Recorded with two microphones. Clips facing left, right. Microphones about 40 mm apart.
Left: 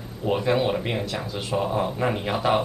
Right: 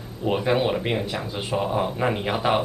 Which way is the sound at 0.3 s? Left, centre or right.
Centre.